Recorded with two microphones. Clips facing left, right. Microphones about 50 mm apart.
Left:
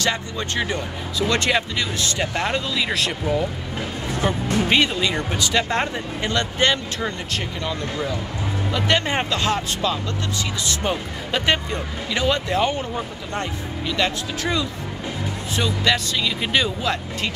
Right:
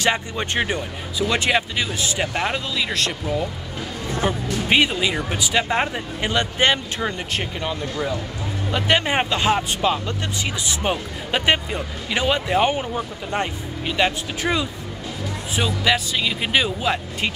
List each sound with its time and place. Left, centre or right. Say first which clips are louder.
0.0 s speech: right 2 dB; right
1.2 s speech: even; centre
4.2 s speech: left 2 dB; centre
8.7 s speech: right 2 dB; centre